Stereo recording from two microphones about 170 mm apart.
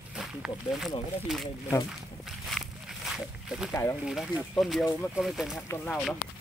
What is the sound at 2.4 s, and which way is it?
Walk, centre (ahead or behind).